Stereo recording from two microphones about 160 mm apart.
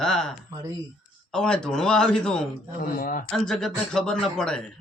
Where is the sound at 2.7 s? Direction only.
60° left (ahead or behind).